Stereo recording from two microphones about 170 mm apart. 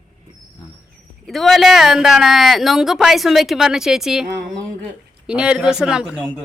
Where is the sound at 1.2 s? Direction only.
Centre (ahead or behind).